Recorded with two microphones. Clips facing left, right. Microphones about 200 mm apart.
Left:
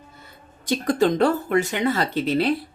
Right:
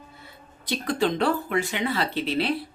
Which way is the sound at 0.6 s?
45° left (ahead or behind).